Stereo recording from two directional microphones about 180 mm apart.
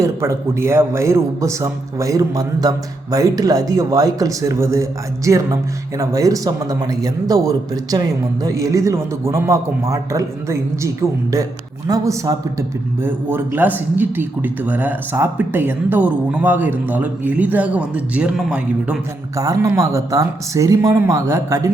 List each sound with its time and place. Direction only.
0.0 s a man's voice: 15° right (ahead or behind)
19.4 s a man's voice: 15° right (ahead or behind)